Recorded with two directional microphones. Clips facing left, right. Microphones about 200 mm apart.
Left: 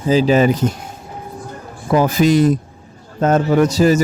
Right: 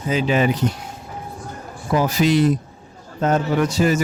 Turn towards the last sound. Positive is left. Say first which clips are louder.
# left 5 dB
turn(degrees=40)  # may be behind; listen again after turning